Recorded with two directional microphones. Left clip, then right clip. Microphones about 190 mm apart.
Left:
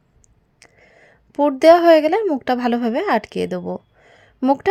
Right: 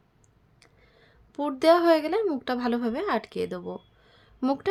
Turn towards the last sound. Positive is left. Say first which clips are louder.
# left 10 dB
turn(degrees=30)  # may be behind; listen again after turning